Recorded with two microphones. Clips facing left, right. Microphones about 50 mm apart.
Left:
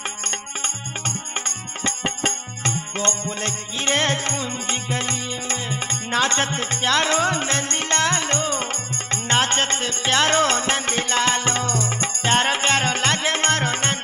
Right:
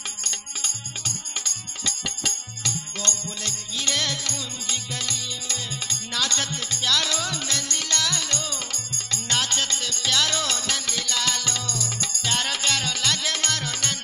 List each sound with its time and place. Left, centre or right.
1.8 s music: left